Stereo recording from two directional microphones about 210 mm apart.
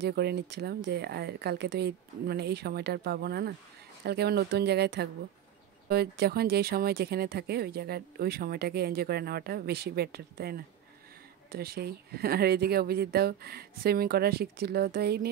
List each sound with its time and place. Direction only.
0.0 s speech: 50° right (ahead or behind)